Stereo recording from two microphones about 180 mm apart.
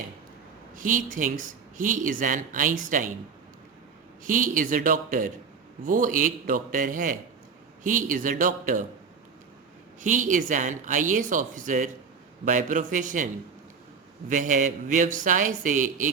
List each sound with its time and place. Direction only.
0.8 s speech: 50° right (ahead or behind)
4.2 s speech: 50° right (ahead or behind)
10.0 s speech: 45° right (ahead or behind)
14.3 s speech: 45° right (ahead or behind)